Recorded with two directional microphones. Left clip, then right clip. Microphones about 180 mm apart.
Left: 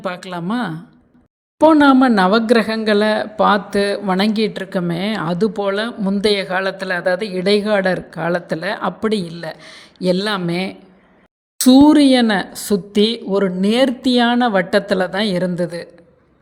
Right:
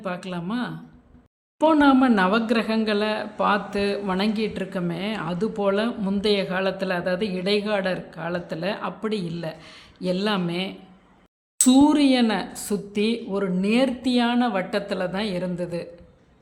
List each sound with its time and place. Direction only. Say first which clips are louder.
0.0 s speech: left 6 dB; 40° left (ahead or behind)